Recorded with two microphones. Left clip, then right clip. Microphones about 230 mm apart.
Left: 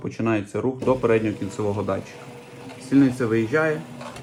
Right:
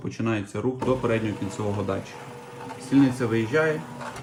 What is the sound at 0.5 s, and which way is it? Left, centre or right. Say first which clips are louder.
Speech: left 3 dB; left.